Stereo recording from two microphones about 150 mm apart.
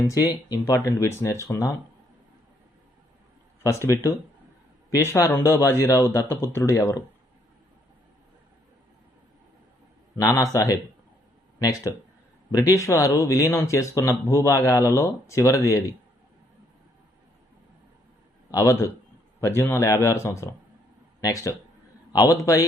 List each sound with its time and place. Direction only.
0.1 s speech: 25° left (ahead or behind)
3.6 s speech: 20° left (ahead or behind)
10.2 s speech: 20° left (ahead or behind)
18.5 s speech: 20° left (ahead or behind)